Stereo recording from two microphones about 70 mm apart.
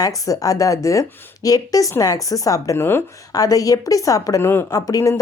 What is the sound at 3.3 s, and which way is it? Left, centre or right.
A woman's voice, left.